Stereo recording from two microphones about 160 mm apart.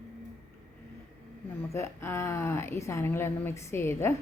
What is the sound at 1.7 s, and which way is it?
A woman's voice, 15° left (ahead or behind).